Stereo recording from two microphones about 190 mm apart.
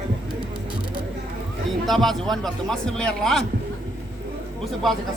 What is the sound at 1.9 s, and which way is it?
A man's voice, centre (ahead or behind).